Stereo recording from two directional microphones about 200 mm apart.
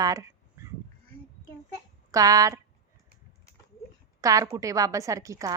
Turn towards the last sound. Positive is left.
turn(degrees=-15)  # may be behind; listen again after turning